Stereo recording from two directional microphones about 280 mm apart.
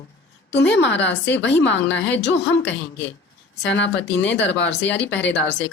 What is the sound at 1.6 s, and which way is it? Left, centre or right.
Speech, centre.